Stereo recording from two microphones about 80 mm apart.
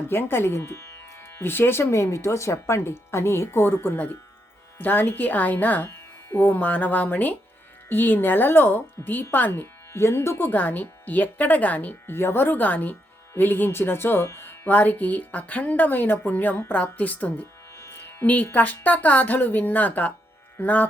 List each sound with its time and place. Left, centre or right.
0.1 s speech: left
17.7 s music: left
18.5 s speech: centre